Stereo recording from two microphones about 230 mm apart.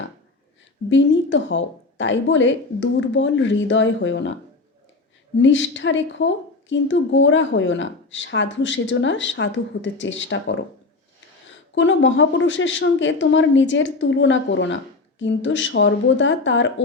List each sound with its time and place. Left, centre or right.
0.9 s a woman's voice: left
5.4 s a woman's voice: left
11.7 s a woman's voice: left